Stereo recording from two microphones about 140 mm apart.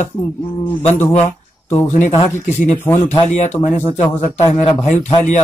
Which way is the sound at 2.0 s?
55° left (ahead or behind).